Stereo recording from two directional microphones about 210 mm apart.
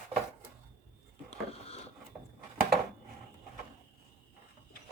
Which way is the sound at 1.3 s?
30° left (ahead or behind).